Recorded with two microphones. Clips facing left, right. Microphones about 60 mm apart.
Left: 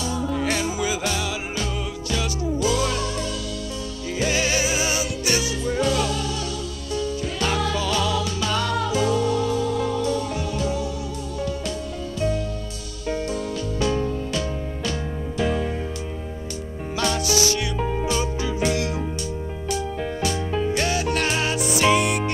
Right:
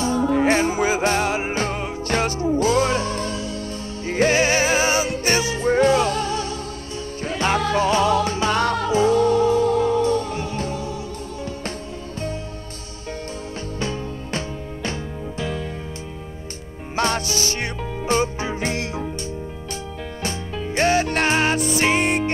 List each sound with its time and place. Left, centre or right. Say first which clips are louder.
0.0 s music: right 6 dB; right
14.3 s music: left 1 dB; right
16.9 s music: right 1 dB; right